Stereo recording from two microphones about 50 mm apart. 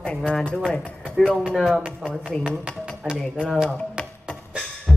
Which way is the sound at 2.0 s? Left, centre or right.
Centre.